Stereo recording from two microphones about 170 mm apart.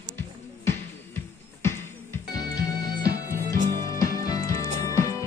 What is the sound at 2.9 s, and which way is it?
Music, 65° right (ahead or behind).